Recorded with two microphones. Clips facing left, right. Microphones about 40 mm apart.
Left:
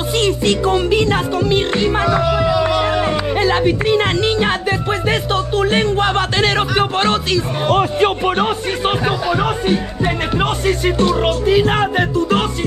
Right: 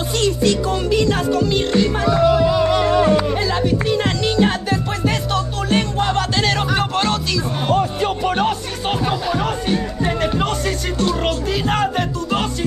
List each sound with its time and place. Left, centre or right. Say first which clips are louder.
0.4 s music: left 3 dB; left
9.0 s music: left 3 dB; left